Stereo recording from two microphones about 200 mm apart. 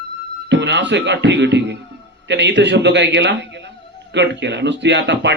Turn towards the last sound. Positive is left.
turn(degrees=-60)  # may be behind; listen again after turning